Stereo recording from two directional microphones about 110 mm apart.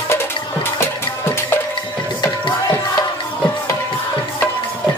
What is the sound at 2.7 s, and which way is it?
Music, 25° left (ahead or behind).